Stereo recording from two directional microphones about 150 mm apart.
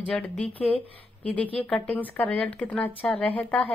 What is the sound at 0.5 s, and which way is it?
Speech, 40° left (ahead or behind).